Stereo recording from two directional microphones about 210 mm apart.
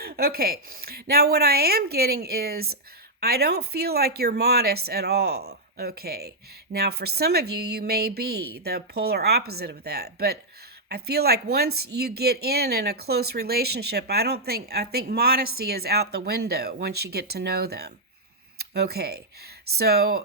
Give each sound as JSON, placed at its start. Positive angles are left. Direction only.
{"t": 0.0, "sound": "speech", "side_deg": -50}